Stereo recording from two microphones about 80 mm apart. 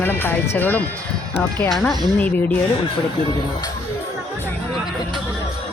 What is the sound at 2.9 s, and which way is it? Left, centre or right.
Speech, left.